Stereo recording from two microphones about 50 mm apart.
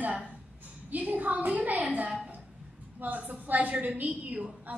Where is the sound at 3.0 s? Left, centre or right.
Right.